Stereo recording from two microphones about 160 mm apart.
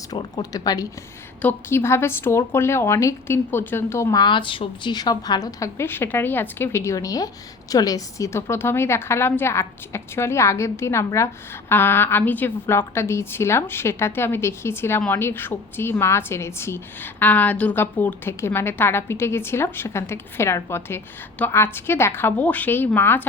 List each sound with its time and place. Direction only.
0.1 s speech: 25° left (ahead or behind)
1.4 s a woman's voice: 10° left (ahead or behind)